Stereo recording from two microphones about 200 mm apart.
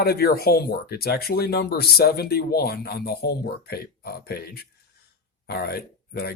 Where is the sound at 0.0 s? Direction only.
50° left (ahead or behind).